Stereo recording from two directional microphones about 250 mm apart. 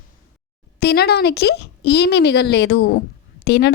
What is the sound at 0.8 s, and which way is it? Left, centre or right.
A woman's voice, left.